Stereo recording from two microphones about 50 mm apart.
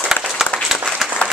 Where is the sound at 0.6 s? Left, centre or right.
Centre.